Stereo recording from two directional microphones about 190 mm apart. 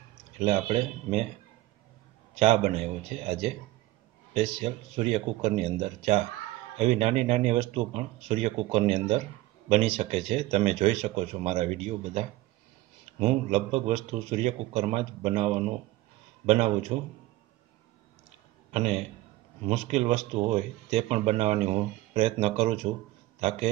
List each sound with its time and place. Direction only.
0.5 s speech: 35° right (ahead or behind)
2.3 s speech: 35° right (ahead or behind)
16.9 s speech: 30° right (ahead or behind)
18.7 s a man's voice: 35° right (ahead or behind)